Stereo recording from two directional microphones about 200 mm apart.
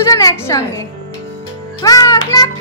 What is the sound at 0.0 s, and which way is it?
Speech, 15° left (ahead or behind).